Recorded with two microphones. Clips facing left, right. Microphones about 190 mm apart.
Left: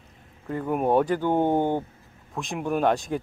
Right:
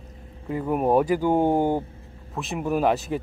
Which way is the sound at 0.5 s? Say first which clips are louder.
Right 1 dB; 5° right (ahead or behind).